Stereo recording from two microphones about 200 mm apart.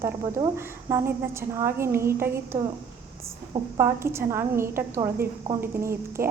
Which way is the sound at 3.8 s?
15° right (ahead or behind).